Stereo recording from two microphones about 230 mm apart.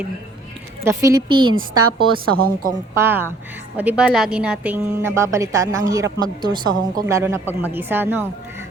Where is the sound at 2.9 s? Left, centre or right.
Centre.